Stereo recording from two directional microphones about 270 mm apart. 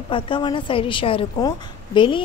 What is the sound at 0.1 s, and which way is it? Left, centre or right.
A woman's voice, centre.